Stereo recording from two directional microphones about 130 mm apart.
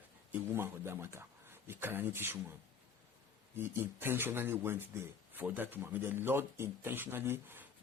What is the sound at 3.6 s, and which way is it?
Speech, 15° right (ahead or behind).